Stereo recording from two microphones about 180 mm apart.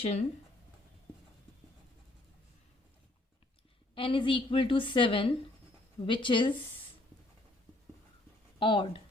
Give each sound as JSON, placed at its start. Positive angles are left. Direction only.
{"t": 0.0, "sound": "speech", "side_deg": 40}
{"t": 3.9, "sound": "a woman's voice", "side_deg": 30}
{"t": 8.5, "sound": "speech", "side_deg": 30}